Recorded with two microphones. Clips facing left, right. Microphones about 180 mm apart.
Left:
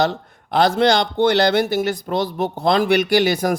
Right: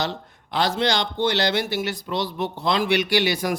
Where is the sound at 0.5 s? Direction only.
55° left (ahead or behind).